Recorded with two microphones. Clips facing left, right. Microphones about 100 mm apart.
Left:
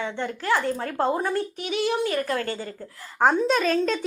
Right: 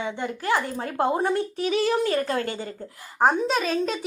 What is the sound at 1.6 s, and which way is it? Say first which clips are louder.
Speech: right 2 dB; 35° right (ahead or behind).